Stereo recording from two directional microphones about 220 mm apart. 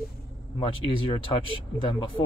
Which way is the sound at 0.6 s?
25° left (ahead or behind).